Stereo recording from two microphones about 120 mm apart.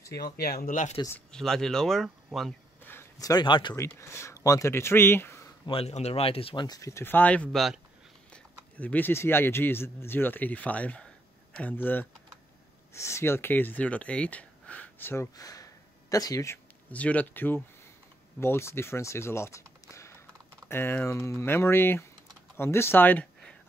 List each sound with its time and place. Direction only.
0.6 s speech: 80° left
1.3 s speech: 5° left (ahead or behind)
2.8 s a sound: 20° left (ahead or behind)
3.2 s speech: 35° left (ahead or behind)
3.7 s speech: 25° left (ahead or behind)
5.7 s speech: 55° left (ahead or behind); by 6.8 s 40° left (ahead or behind)
6.8 s speech: 25° left (ahead or behind)
7.5 s speech: centre (ahead or behind)
8.3 s speech: 15° left (ahead or behind)
15.3 s a sound: 30° left (ahead or behind)
16.9 s speech: 10° left (ahead or behind)